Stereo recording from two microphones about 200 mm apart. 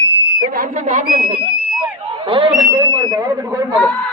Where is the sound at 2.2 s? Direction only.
25° right (ahead or behind).